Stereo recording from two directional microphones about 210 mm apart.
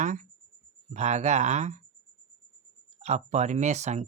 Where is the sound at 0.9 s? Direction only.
35° right (ahead or behind).